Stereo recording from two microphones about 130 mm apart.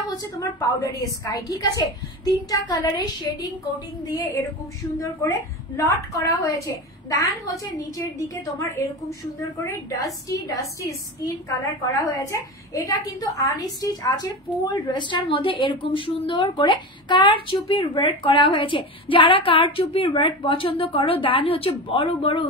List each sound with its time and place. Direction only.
0.1 s a woman's voice: 25° left (ahead or behind)
5.2 s a woman's voice: 20° left (ahead or behind)
12.2 s a woman's voice: 25° left (ahead or behind); by 22.5 s 45° left (ahead or behind)